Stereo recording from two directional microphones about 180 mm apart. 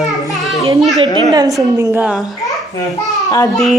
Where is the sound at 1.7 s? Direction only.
15° right (ahead or behind).